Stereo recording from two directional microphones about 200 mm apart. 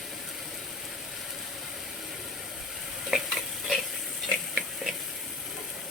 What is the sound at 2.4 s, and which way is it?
Stir, centre (ahead or behind).